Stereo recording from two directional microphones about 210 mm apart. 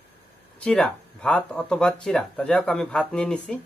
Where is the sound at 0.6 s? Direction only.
5° left (ahead or behind).